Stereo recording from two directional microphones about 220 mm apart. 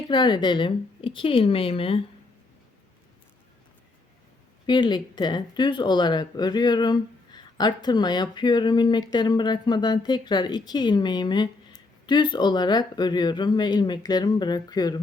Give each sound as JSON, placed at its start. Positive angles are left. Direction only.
{"t": 0.1, "sound": "speech", "side_deg": 20}
{"t": 4.6, "sound": "speech", "side_deg": 20}